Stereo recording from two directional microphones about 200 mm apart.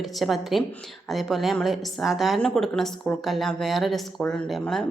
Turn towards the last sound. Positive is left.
turn(degrees=0)  # may be behind; listen again after turning